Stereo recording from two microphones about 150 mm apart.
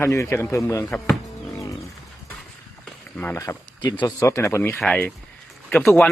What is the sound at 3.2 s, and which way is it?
Speech, 20° left (ahead or behind).